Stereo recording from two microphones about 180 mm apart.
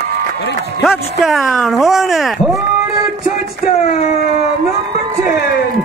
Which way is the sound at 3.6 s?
55° left (ahead or behind).